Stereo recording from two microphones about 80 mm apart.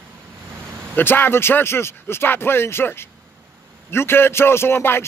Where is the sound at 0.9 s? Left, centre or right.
Left.